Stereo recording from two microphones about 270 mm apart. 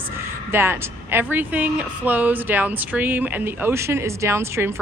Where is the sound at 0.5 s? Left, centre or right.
Centre.